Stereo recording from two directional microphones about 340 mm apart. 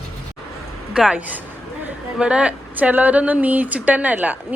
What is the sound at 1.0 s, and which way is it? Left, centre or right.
A woman's voice, centre.